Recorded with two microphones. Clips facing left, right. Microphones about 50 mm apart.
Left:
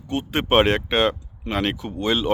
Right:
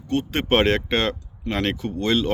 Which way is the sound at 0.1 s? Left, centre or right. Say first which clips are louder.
Left 1 dB; centre.